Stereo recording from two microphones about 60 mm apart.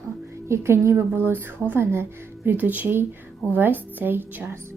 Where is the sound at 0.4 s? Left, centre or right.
Right.